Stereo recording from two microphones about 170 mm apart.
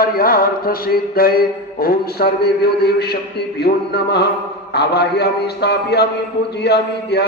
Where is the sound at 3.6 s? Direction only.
70° left (ahead or behind).